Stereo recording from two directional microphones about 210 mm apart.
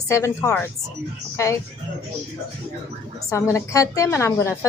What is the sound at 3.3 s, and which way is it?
A woman's voice, 15° left (ahead or behind).